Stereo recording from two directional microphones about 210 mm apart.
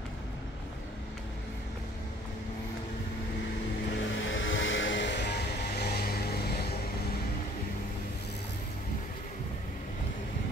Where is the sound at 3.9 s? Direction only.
60° left (ahead or behind).